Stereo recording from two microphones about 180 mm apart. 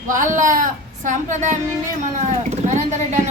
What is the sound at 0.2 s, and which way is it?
Speech, 45° right (ahead or behind).